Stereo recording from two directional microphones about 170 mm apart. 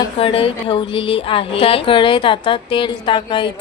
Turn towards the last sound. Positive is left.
turn(degrees=30)  # may be behind; listen again after turning